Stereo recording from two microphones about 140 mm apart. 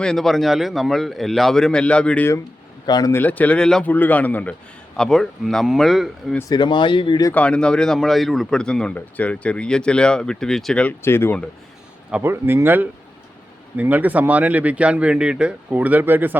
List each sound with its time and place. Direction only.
0.0 s speech: 5° left (ahead or behind)
2.8 s speech: 30° left (ahead or behind)
3.1 s speech: 15° left (ahead or behind)
6.5 s speech: 35° left (ahead or behind)
7.3 s speech: 10° left (ahead or behind)
12.1 s speech: 15° right (ahead or behind)